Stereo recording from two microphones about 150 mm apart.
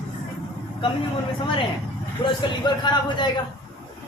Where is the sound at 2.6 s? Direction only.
30° left (ahead or behind).